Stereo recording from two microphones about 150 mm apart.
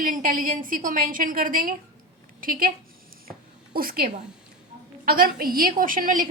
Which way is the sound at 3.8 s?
75° right (ahead or behind).